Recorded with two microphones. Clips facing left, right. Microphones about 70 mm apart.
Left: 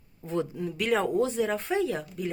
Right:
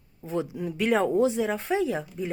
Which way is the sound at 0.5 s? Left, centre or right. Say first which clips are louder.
Right 4 dB; centre.